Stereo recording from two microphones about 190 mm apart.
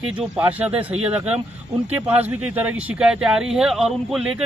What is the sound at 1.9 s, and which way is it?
Speech, 10° right (ahead or behind).